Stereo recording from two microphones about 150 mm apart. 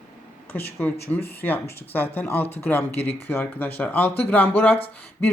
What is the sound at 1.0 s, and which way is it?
Speech, 15° left (ahead or behind).